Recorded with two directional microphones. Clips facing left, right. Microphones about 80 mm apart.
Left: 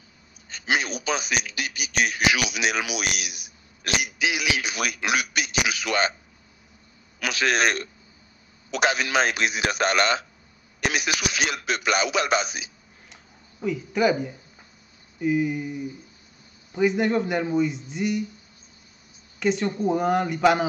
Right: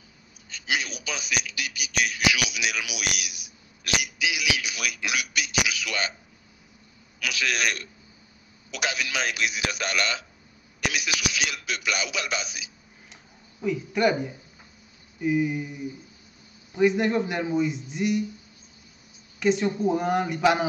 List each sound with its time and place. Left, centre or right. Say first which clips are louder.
0.5 s a man's voice: left 4 dB; left
7.2 s a man's voice: left 5 dB; left
13.1 s a sound: even; centre
15.1 s a man's voice: left 1 dB; centre
19.4 s a man's voice: even; centre